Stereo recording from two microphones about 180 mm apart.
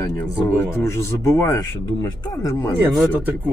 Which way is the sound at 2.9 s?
Centre (ahead or behind).